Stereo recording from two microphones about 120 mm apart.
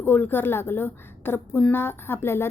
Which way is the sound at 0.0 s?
15° left (ahead or behind).